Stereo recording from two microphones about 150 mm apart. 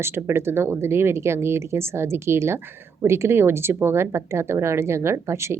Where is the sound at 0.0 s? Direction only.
15° right (ahead or behind).